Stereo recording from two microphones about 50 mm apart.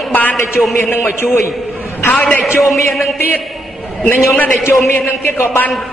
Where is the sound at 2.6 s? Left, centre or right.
Centre.